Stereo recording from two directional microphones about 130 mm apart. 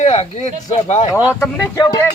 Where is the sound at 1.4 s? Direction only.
20° left (ahead or behind).